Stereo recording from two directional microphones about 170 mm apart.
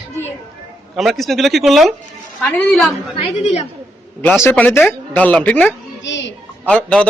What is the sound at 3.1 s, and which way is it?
Speech, 40° left (ahead or behind).